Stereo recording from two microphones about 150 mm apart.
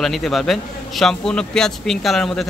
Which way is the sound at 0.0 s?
Centre (ahead or behind).